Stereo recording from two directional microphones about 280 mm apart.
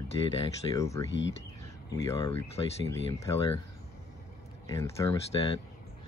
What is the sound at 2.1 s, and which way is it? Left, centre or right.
Speech, centre.